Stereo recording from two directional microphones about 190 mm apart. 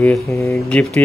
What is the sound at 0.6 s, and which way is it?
Speech, 5° left (ahead or behind).